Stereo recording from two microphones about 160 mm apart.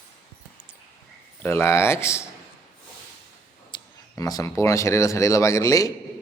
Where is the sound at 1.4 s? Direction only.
15° left (ahead or behind).